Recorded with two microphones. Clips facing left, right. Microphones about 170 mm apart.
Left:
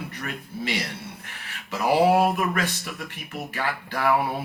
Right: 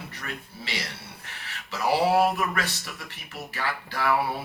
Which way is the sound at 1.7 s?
50° left (ahead or behind).